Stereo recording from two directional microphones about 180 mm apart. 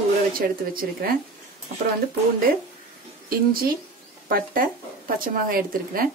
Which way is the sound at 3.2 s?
55° right (ahead or behind).